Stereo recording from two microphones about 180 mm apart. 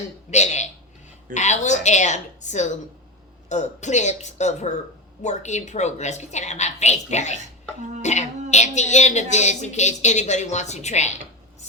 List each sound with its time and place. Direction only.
0.3 s speech: 40° left (ahead or behind)